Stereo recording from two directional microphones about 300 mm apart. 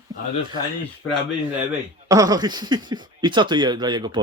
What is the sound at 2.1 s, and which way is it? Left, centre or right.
Speech, centre.